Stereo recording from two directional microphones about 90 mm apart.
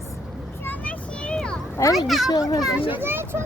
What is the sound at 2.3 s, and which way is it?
Speech, 45° left (ahead or behind).